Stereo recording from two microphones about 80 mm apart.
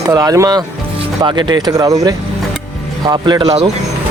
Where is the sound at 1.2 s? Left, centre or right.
Right.